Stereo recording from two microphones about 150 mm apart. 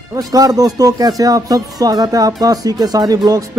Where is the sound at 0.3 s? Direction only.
25° right (ahead or behind).